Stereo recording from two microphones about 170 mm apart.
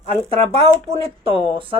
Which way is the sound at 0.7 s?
35° right (ahead or behind).